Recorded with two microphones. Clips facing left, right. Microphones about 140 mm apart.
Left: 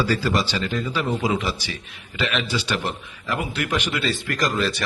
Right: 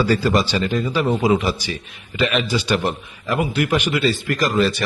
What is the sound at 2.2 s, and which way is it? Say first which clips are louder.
Speech: right 5 dB; 50° right (ahead or behind).